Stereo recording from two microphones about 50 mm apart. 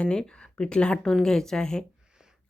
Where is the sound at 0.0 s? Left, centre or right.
Centre.